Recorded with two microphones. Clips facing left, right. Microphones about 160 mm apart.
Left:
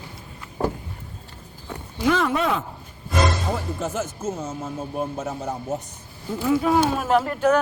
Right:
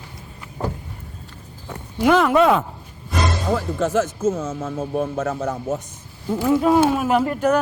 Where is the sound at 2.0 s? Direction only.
70° right (ahead or behind).